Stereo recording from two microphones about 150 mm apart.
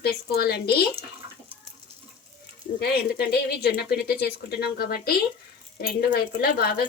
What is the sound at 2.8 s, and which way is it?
A woman's voice, 90° left.